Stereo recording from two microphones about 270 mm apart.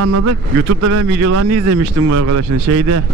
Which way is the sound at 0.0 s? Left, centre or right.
Right.